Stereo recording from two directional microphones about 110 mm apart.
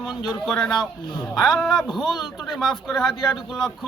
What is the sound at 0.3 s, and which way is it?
Speech, 5° left (ahead or behind).